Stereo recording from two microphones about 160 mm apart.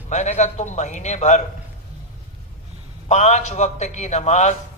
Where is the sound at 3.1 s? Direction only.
45° left (ahead or behind).